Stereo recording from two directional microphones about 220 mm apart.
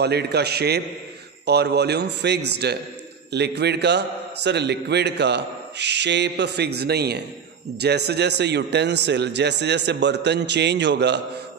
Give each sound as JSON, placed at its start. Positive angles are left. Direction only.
{"t": 0.0, "sound": "a man's voice", "side_deg": -50}